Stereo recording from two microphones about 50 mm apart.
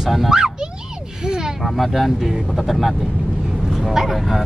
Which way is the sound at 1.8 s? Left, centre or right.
Centre.